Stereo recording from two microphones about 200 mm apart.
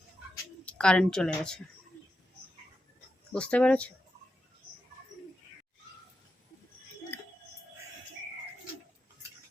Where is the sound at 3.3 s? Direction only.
5° left (ahead or behind).